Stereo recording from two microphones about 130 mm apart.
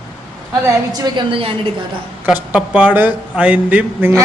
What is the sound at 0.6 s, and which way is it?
Speech, 30° right (ahead or behind).